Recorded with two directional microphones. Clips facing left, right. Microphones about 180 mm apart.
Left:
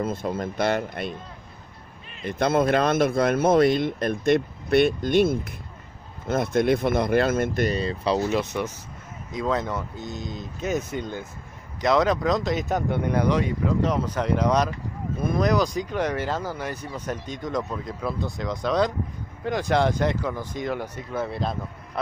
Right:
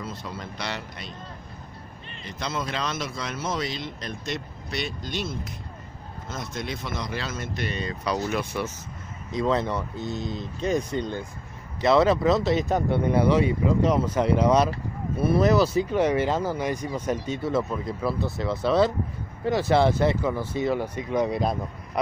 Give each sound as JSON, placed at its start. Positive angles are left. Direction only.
{"t": 0.0, "sound": "speech", "side_deg": 50}
{"t": 2.2, "sound": "speech", "side_deg": 55}
{"t": 7.7, "sound": "speech", "side_deg": 30}
{"t": 9.3, "sound": "speech", "side_deg": 0}
{"t": 21.3, "sound": "speech", "side_deg": 0}